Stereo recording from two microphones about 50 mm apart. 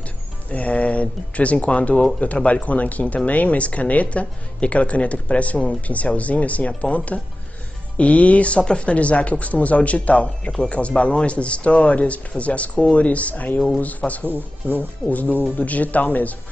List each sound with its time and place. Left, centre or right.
0.5 s speech: left